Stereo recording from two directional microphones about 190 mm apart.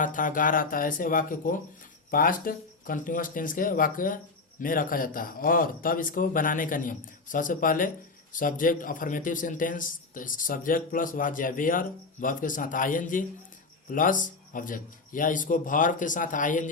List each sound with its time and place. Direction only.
0.0 s speech: 45° left (ahead or behind)